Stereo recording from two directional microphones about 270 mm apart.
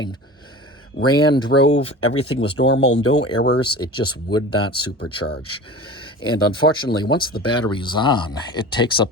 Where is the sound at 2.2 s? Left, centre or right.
Centre.